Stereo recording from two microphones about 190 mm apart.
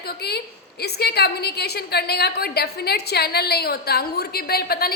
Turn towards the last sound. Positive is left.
turn(degrees=55)  # may be behind; listen again after turning